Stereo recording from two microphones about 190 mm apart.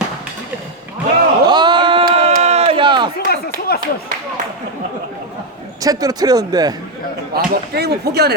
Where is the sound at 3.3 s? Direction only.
55° left (ahead or behind).